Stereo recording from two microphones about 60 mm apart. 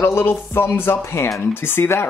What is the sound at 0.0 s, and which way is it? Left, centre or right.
Speech, left.